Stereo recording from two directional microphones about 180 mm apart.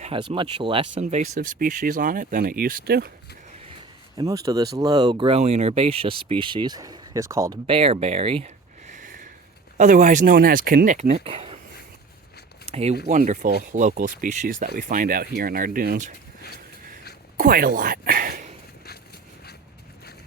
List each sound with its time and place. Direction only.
0.0 s speech: 30° right (ahead or behind)
0.9 s speech: 40° right (ahead or behind); by 3.1 s 60° right (ahead or behind)
4.2 s speech: 20° right (ahead or behind)
7.7 s speech: 30° right (ahead or behind)
8.9 s a sound: 45° right (ahead or behind)
9.7 s speech: 45° right (ahead or behind)
12.6 s speech: 35° right (ahead or behind); by 16.1 s 50° right (ahead or behind)
17.3 s speech: 50° right (ahead or behind)